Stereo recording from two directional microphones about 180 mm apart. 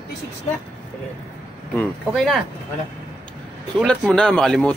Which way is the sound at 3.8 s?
5° left (ahead or behind).